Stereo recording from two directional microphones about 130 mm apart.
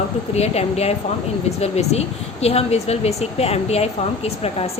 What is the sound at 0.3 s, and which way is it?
A woman's voice, 55° left (ahead or behind).